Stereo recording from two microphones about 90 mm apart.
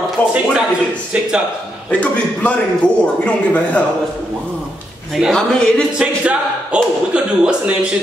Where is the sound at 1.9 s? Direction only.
15° left (ahead or behind).